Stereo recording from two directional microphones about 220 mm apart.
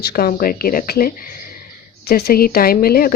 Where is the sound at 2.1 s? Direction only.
45° left (ahead or behind).